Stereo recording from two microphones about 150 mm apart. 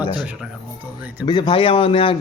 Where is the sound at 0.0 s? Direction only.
30° left (ahead or behind).